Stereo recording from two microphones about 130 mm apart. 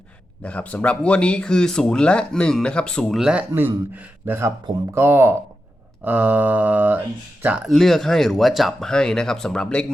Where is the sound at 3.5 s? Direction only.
15° right (ahead or behind).